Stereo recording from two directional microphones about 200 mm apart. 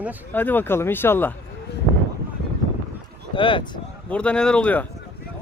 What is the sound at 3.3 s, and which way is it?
Speech, 25° left (ahead or behind).